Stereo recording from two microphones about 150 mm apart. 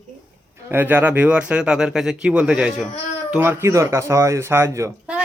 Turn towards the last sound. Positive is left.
turn(degrees=-20)  # may be behind; listen again after turning